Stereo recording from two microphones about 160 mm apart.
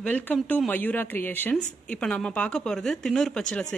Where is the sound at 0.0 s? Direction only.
10° left (ahead or behind).